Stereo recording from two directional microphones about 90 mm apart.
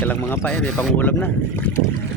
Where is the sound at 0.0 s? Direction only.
20° left (ahead or behind).